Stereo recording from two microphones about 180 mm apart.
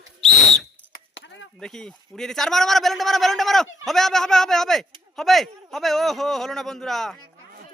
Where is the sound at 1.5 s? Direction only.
5° left (ahead or behind).